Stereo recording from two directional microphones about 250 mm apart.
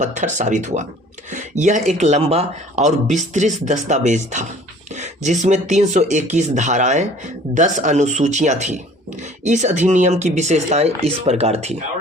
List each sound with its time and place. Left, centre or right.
0.0 s speech: right